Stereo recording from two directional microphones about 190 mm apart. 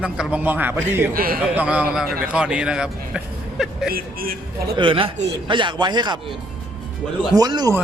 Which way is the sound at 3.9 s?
50° right (ahead or behind).